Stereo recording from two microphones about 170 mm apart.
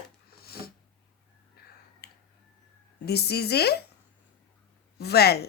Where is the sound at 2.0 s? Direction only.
70° left (ahead or behind).